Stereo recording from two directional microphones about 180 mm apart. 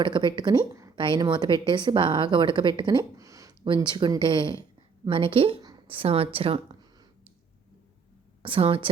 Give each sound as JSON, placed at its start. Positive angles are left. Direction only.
{"t": 0.0, "sound": "a woman's voice", "side_deg": -25}
{"t": 8.4, "sound": "a woman's voice", "side_deg": -30}